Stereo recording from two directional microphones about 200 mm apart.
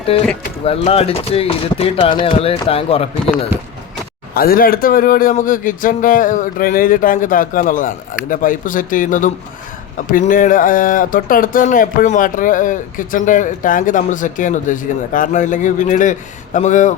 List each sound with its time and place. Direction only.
0.1 s speech: 30° left (ahead or behind)
4.4 s speech: 45° left (ahead or behind)